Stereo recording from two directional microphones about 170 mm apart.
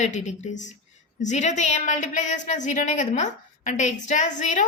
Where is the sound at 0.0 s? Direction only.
45° left (ahead or behind).